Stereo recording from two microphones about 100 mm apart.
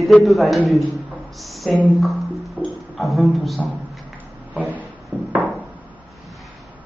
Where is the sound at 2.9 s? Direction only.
Centre (ahead or behind).